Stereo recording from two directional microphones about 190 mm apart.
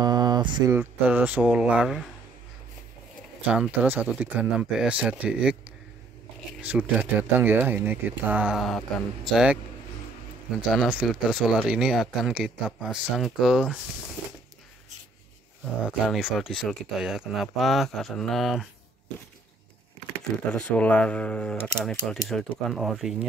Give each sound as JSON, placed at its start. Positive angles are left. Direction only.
{"t": 0.0, "sound": "a sound", "side_deg": -20}
{"t": 0.7, "sound": "speech", "side_deg": -10}
{"t": 3.4, "sound": "speech", "side_deg": -5}
{"t": 6.6, "sound": "speech", "side_deg": -10}
{"t": 10.7, "sound": "speech", "side_deg": 0}
{"t": 16.1, "sound": "speech", "side_deg": 0}
{"t": 20.5, "sound": "speech", "side_deg": 5}